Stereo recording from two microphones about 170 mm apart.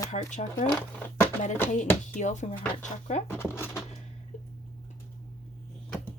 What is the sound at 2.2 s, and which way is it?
Speech, 45° left (ahead or behind).